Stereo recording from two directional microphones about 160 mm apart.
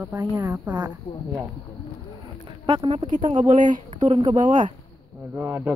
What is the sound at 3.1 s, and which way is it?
Speech, 50° right (ahead or behind).